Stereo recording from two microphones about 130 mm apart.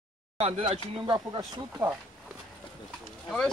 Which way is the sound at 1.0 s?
30° right (ahead or behind).